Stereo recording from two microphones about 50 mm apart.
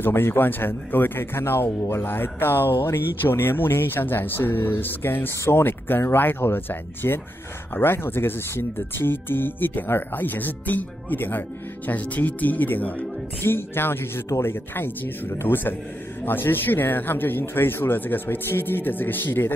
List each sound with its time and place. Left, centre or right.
0.0 s speech: left
1.3 s speech: left
2.0 s speech: left
13.4 s speech: left